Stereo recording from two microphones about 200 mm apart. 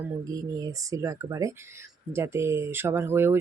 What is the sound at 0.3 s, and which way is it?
Speech, 20° right (ahead or behind).